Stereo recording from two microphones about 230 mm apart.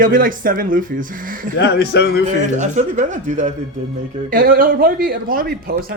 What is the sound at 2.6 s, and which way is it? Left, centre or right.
A man's voice, right.